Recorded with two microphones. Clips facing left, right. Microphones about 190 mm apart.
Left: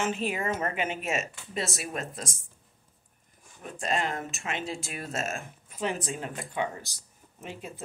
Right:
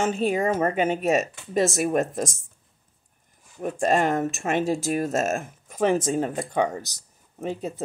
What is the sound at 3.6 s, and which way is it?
Speech, 45° right (ahead or behind).